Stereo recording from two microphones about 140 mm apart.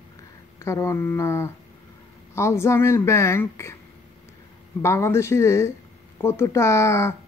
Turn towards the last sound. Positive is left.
turn(degrees=20)  # may be behind; listen again after turning